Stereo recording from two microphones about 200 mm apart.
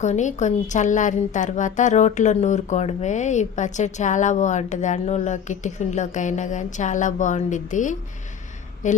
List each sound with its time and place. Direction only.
0.0 s a woman's voice: 35° left (ahead or behind)